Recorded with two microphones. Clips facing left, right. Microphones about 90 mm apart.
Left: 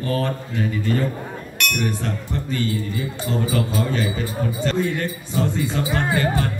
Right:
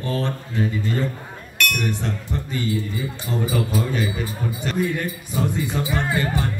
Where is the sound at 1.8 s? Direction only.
20° right (ahead or behind).